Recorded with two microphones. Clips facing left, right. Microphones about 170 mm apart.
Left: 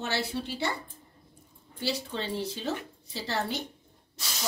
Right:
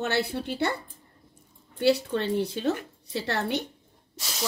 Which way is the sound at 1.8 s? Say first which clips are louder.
Right 9 dB; 60° right (ahead or behind).